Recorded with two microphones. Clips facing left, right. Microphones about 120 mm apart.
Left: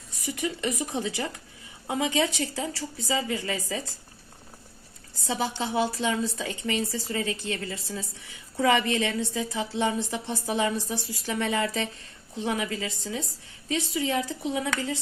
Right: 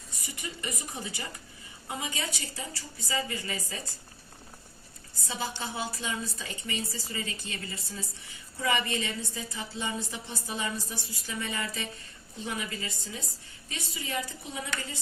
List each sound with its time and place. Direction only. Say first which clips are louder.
0.3 s a woman's voice: left 9 dB; 90° left
5.2 s a woman's voice: left 6 dB; 90° left